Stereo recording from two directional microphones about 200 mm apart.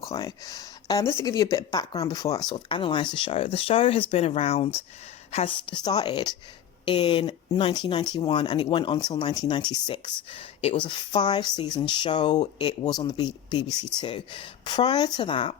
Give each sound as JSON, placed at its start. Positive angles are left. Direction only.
{"t": 0.0, "sound": "speech", "side_deg": 15}